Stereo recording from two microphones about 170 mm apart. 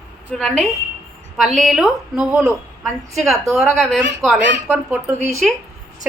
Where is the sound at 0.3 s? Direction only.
Centre (ahead or behind).